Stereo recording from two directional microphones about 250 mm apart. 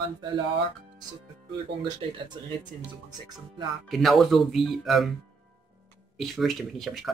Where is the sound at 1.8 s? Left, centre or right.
Centre.